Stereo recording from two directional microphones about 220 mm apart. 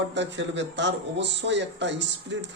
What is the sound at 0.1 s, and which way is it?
A man's voice, 55° right (ahead or behind).